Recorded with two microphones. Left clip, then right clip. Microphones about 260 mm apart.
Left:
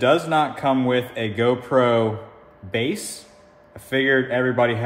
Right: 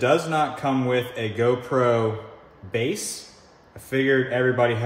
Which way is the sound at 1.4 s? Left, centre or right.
Left.